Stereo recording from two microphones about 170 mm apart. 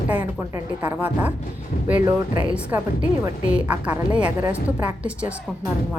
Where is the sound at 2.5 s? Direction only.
10° right (ahead or behind).